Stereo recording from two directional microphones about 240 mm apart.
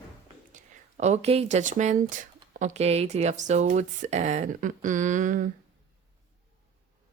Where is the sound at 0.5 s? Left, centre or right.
Right.